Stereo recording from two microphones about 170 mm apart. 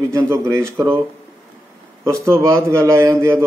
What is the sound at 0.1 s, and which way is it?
Speech, 15° right (ahead or behind).